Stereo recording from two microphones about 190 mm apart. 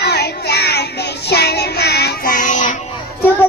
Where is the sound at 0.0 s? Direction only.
60° left (ahead or behind); by 2.7 s 45° left (ahead or behind).